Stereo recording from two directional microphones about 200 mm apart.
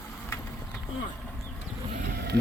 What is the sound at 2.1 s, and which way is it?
Run, 55° right (ahead or behind).